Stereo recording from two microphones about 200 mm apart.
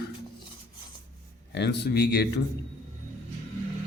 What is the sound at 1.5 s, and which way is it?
Speech, 55° left (ahead or behind).